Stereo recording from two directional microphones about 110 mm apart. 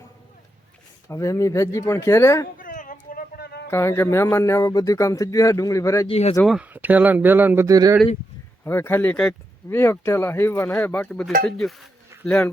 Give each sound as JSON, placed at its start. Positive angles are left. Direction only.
{"t": 1.0, "sound": "speech", "side_deg": 30}
{"t": 3.7, "sound": "speech", "side_deg": 25}
{"t": 6.1, "sound": "speech", "side_deg": 70}
{"t": 6.6, "sound": "speech", "side_deg": -15}
{"t": 7.7, "sound": "speech", "side_deg": -30}
{"t": 8.6, "sound": "speech", "side_deg": 20}